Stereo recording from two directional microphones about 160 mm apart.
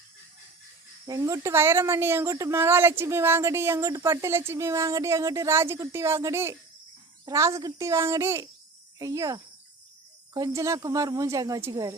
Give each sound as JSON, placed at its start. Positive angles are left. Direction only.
{"t": 1.0, "sound": "a woman's voice", "side_deg": -20}